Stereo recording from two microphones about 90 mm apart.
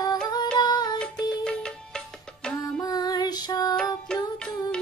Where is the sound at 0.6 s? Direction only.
50° left (ahead or behind).